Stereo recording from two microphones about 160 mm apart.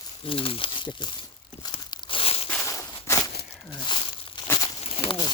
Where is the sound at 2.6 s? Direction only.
15° left (ahead or behind).